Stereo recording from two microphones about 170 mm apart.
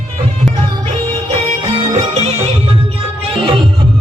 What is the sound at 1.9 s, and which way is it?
Music, 35° right (ahead or behind).